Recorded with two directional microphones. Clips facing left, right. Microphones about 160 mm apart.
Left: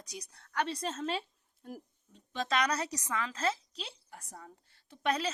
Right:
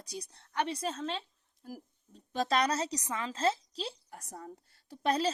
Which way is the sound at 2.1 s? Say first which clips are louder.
Right 3 dB; 40° right (ahead or behind).